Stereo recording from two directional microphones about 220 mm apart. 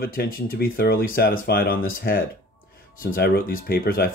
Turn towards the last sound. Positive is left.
turn(degrees=40)  # may be behind; listen again after turning